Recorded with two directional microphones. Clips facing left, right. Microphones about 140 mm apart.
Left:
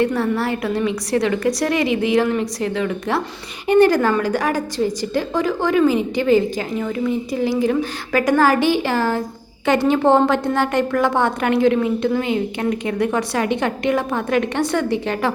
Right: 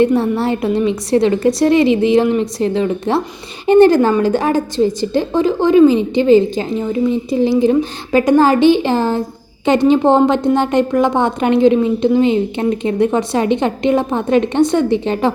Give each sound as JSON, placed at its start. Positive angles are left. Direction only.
{"t": 0.0, "sound": "a woman's voice", "side_deg": -25}